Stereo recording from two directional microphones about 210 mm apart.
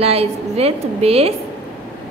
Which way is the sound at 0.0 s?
30° right (ahead or behind).